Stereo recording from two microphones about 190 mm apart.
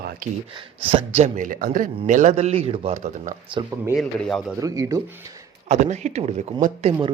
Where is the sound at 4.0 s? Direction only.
Centre (ahead or behind).